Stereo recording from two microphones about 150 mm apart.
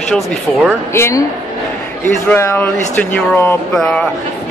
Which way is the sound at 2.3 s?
15° left (ahead or behind).